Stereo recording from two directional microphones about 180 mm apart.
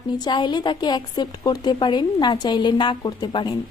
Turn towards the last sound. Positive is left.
turn(degrees=25)  # may be behind; listen again after turning